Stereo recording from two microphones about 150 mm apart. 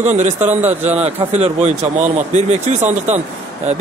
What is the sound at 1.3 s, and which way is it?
Speech, 45° right (ahead or behind).